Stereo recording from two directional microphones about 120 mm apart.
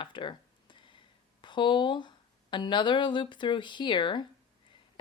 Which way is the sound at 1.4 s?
40° left (ahead or behind).